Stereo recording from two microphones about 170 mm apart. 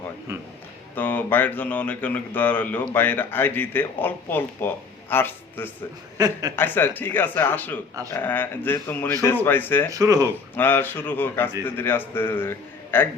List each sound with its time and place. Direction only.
0.9 s speech: 10° left (ahead or behind)
6.1 s speech: 20° right (ahead or behind)
6.6 s speech: 10° left (ahead or behind)
9.9 s speech: 20° right (ahead or behind)
10.5 s speech: 10° left (ahead or behind)